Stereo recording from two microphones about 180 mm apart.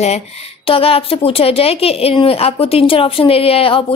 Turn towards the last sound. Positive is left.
turn(degrees=30)  # may be behind; listen again after turning